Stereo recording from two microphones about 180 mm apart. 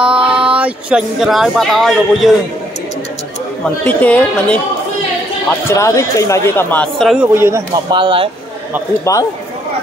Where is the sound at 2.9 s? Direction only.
80° left.